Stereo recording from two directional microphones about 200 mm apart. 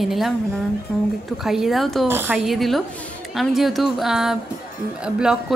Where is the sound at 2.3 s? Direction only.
Centre (ahead or behind).